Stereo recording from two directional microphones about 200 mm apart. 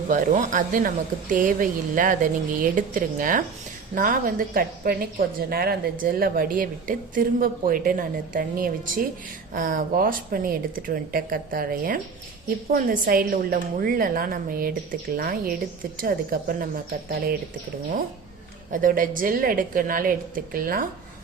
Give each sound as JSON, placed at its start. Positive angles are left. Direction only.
{"t": 0.1, "sound": "a woman's voice", "side_deg": -40}
{"t": 18.7, "sound": "a woman's voice", "side_deg": -40}